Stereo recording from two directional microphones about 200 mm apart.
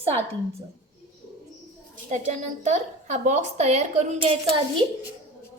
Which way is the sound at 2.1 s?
40° right (ahead or behind).